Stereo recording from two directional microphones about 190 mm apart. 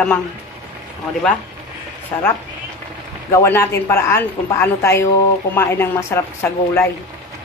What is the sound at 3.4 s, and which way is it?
A man's voice, 10° left (ahead or behind).